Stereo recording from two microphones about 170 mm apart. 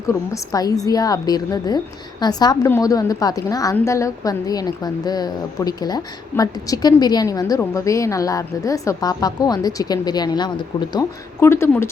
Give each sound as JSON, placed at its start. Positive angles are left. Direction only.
{"t": 0.1, "sound": "a woman's voice", "side_deg": 20}
{"t": 11.3, "sound": "speech", "side_deg": 15}